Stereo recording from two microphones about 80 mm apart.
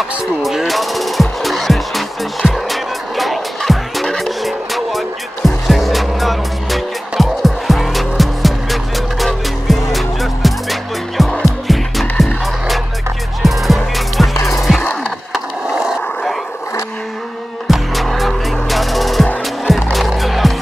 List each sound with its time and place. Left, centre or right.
0.4 s music: centre
13.4 s music: centre
14.8 s wood: centre
15.3 s skateboard: centre
17.6 s music: centre
19.6 s skateboard: centre